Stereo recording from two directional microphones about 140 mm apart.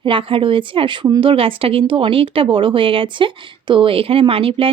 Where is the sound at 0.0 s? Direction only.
40° right (ahead or behind).